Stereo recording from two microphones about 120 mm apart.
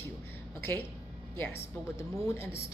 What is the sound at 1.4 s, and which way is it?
Speech, 20° left (ahead or behind).